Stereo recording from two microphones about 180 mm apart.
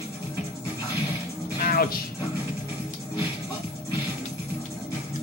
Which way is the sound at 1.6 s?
55° left (ahead or behind).